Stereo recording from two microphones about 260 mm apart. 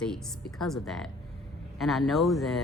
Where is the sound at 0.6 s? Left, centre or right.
Centre.